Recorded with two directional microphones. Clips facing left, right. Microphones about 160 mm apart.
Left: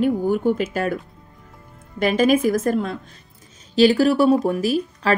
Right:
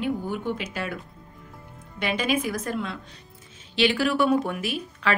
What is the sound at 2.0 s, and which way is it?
A woman's voice, 45° left (ahead or behind).